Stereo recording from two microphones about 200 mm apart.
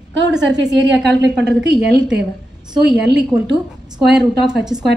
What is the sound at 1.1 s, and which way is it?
Speech, 60° right (ahead or behind).